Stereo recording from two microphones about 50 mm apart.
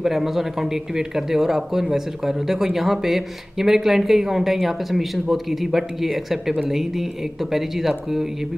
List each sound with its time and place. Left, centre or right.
0.0 s speech: centre